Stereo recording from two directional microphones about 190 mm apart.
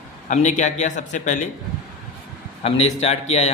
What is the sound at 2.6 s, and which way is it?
Speech, 35° left (ahead or behind).